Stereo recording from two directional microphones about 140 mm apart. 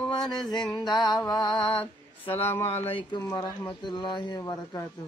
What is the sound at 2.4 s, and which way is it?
Speech, 15° left (ahead or behind).